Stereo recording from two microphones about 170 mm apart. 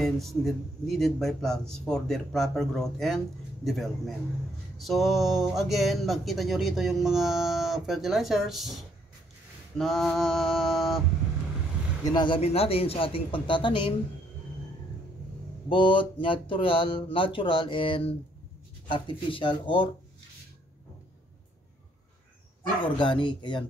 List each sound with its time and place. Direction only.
0.0 s speech: centre (ahead or behind)
9.8 s speech: centre (ahead or behind)
12.0 s speech: 25° left (ahead or behind)
12.4 s speech: 35° left (ahead or behind)
15.7 s speech: 30° left (ahead or behind)
22.9 s speech: 30° left (ahead or behind)